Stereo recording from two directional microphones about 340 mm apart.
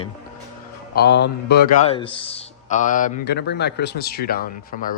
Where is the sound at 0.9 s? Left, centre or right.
Left.